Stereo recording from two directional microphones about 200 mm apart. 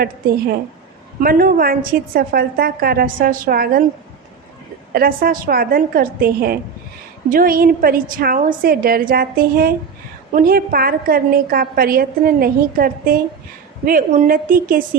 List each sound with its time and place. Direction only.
0.0 s a woman's voice: 50° right (ahead or behind)
4.9 s a woman's voice: 45° right (ahead or behind)